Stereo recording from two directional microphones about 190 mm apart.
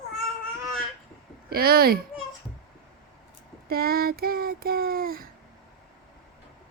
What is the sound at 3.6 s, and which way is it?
Speech, 50° right (ahead or behind).